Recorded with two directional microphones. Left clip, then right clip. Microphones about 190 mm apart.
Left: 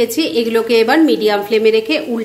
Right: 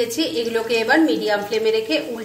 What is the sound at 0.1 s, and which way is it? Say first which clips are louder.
A woman's voice: left 6 dB; 40° left (ahead or behind).